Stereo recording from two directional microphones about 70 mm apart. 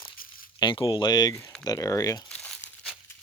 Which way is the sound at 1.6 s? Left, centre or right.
Left.